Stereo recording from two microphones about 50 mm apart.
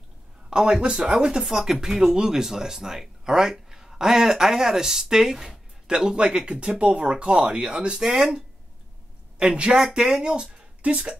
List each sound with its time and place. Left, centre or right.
0.5 s speech: centre